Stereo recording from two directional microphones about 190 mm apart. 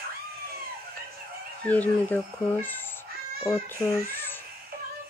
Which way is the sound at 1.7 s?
10° left (ahead or behind).